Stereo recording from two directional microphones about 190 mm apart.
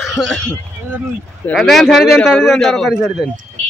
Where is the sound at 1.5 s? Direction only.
Centre (ahead or behind).